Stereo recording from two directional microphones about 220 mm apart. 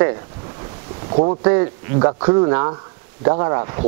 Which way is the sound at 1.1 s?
30° right (ahead or behind).